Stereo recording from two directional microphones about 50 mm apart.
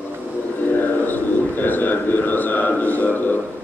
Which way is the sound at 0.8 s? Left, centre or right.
Left.